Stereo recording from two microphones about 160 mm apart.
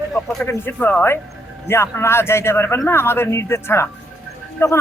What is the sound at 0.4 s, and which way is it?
A man's voice, 15° left (ahead or behind).